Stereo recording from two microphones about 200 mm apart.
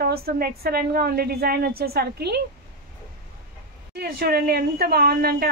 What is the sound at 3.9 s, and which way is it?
A woman's voice, 50° right (ahead or behind).